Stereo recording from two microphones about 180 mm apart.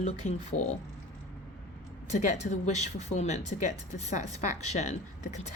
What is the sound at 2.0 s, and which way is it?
Speech, 40° left (ahead or behind).